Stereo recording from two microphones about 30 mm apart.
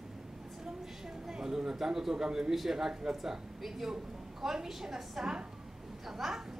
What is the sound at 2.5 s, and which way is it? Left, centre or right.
A woman's voice, centre.